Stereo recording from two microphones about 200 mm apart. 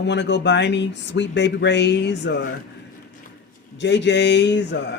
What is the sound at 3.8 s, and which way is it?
Speech, 60° left (ahead or behind).